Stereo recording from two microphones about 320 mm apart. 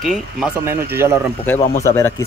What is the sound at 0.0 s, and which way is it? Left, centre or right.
Speech, centre.